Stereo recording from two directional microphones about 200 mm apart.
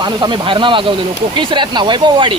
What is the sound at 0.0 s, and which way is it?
Speech, 25° right (ahead or behind).